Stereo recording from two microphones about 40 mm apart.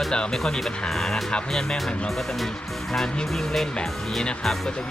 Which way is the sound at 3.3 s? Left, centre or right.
Centre.